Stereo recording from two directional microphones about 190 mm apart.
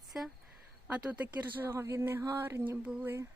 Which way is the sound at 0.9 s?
5° right (ahead or behind).